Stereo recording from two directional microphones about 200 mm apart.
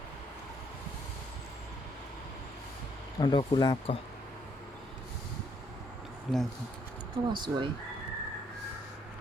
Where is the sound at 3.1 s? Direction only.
25° left (ahead or behind).